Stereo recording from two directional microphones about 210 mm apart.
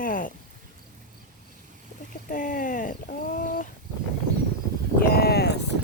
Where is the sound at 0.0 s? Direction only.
40° left (ahead or behind).